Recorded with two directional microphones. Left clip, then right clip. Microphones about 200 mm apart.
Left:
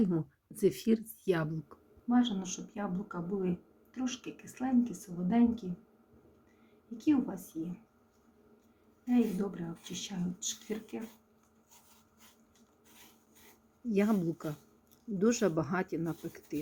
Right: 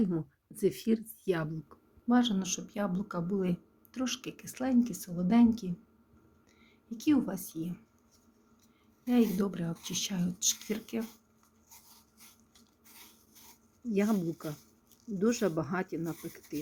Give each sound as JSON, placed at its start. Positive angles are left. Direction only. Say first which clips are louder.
{"t": 0.0, "sound": "speech", "louder": "left 1 dB", "side_deg": 0}
{"t": 2.0, "sound": "speech", "louder": "right 2 dB", "side_deg": -50}
{"t": 6.9, "sound": "speech", "louder": "right 1 dB", "side_deg": -55}
{"t": 9.0, "sound": "speech", "louder": "right 2 dB", "side_deg": -50}
{"t": 13.8, "sound": "speech", "louder": "even", "side_deg": 0}